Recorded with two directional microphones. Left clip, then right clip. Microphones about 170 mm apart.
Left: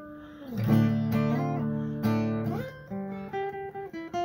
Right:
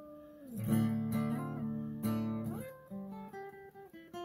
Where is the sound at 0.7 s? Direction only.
30° right (ahead or behind).